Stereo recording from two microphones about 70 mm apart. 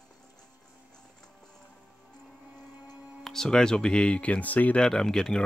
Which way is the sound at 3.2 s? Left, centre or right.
Centre.